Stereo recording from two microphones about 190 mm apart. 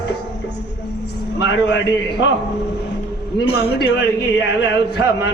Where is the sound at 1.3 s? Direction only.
65° left (ahead or behind).